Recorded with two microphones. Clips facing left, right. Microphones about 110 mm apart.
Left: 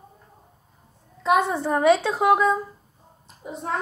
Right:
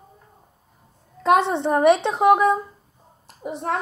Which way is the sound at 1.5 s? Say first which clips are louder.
Right 2 dB; 25° right (ahead or behind).